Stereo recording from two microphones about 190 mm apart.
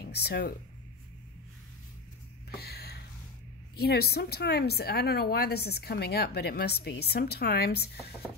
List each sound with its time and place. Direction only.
0.0 s speech: 55° left (ahead or behind)
2.5 s a sound: 55° left (ahead or behind)
3.7 s speech: 55° left (ahead or behind)